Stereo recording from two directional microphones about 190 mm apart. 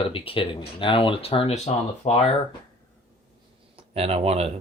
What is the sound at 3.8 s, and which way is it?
Speech, 30° right (ahead or behind).